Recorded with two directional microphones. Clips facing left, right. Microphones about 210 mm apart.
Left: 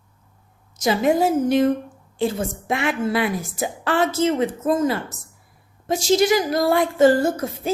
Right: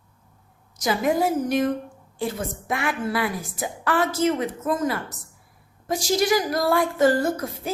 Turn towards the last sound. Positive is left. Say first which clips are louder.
# left 3 dB
turn(degrees=25)  # may be behind; listen again after turning